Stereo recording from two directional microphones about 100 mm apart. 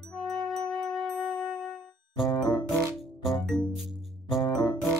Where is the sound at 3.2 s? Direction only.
Centre (ahead or behind).